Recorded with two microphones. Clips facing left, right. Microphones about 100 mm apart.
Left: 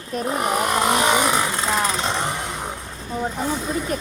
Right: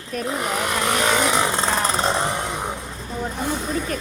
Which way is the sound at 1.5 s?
30° right (ahead or behind).